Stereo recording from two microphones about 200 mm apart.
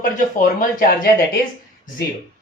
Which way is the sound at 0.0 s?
45° left (ahead or behind).